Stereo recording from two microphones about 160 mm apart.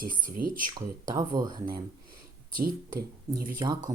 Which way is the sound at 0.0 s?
60° right (ahead or behind).